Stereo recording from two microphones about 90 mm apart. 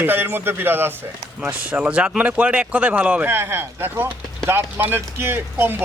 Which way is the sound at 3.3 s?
25° right (ahead or behind).